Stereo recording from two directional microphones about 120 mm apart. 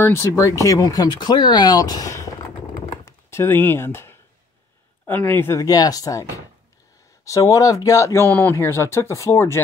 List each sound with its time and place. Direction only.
0.0 s speech: 25° left (ahead or behind)